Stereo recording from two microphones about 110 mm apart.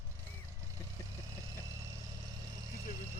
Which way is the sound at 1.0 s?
30° left (ahead or behind).